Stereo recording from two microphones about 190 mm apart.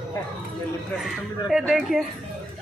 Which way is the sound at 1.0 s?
Centre (ahead or behind).